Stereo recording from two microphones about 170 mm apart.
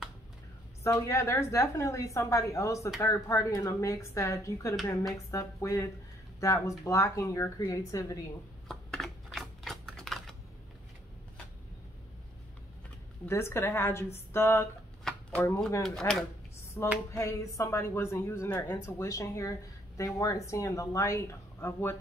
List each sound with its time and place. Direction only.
0.8 s speech: 15° left (ahead or behind)
8.6 s typewriter: centre (ahead or behind)
13.2 s speech: 15° left (ahead or behind)
15.0 s shuffling cards: 10° left (ahead or behind)
16.1 s speech: 15° left (ahead or behind)